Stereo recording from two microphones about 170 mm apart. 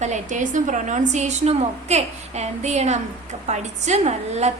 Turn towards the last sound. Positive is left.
turn(degrees=-40)  # may be behind; listen again after turning